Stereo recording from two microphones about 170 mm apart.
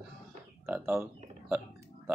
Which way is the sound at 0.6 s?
10° right (ahead or behind).